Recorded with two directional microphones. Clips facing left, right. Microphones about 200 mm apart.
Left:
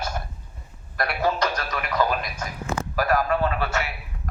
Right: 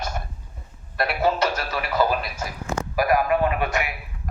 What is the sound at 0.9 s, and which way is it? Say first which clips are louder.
Speech: right 2 dB; 25° right (ahead or behind).